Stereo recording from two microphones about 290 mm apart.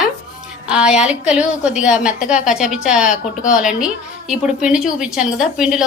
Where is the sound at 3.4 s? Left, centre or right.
Centre.